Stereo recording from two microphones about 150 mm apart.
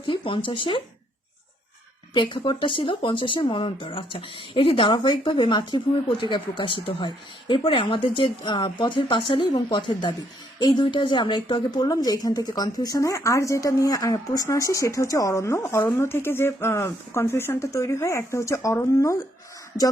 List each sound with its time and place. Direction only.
0.0 s speech: 35° left (ahead or behind)
2.1 s a woman's voice: 30° left (ahead or behind)